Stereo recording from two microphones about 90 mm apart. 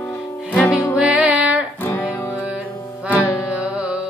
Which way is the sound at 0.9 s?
10° right (ahead or behind).